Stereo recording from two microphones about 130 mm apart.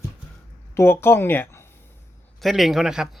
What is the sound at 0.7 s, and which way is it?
Speech, 20° left (ahead or behind).